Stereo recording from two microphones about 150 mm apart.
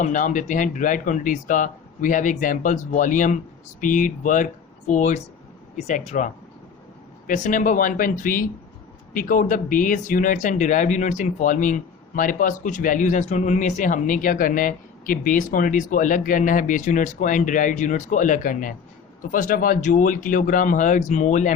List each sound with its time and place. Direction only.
0.0 s speech: 60° left (ahead or behind)